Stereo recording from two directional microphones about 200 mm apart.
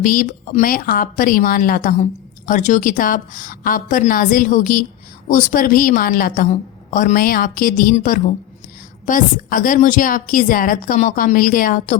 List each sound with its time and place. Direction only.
0.0 s a woman's voice: 40° left (ahead or behind)